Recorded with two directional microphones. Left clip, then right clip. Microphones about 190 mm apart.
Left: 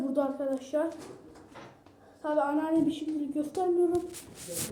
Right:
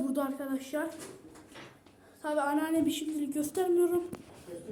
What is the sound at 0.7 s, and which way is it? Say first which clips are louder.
Speech: left 5 dB; 90° right.